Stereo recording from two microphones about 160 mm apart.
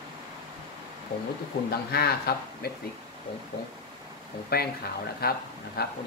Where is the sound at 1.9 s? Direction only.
80° left.